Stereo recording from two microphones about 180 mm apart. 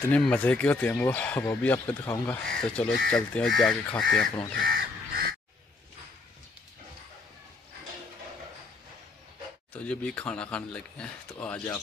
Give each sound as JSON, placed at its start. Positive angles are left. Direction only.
{"t": 0.1, "sound": "speech", "side_deg": 5}
{"t": 4.6, "sound": "crow", "side_deg": -55}
{"t": 9.8, "sound": "speech", "side_deg": 5}